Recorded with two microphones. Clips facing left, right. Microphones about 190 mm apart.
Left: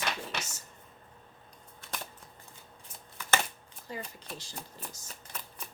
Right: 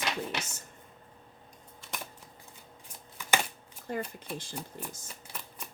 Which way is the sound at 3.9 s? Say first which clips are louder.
Right 6 dB; 55° right (ahead or behind).